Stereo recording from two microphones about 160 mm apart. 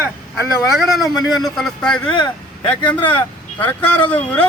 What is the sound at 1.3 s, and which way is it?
Speech, centre (ahead or behind).